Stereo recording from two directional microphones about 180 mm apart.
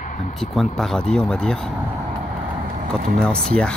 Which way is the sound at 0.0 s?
40° left (ahead or behind).